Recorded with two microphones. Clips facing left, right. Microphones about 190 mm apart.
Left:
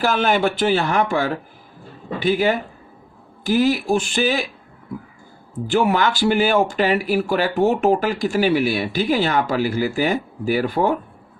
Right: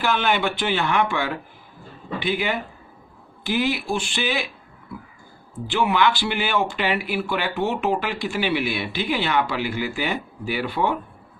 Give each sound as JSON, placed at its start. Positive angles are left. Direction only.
{"t": 0.0, "sound": "speech", "side_deg": 40}
{"t": 5.6, "sound": "speech", "side_deg": 45}